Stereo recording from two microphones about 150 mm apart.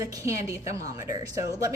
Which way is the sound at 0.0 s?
20° right (ahead or behind).